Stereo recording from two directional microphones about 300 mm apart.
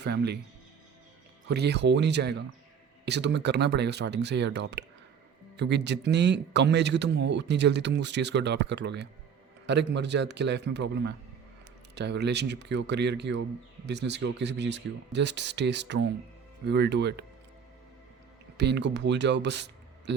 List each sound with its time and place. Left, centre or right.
0.0 s speech: right
1.5 s speech: right
18.5 s speech: right